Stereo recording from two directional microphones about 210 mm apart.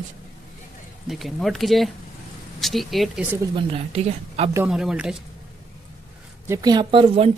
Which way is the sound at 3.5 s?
30° right (ahead or behind).